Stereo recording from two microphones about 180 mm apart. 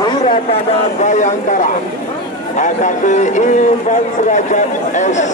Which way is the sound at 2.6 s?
45° left (ahead or behind).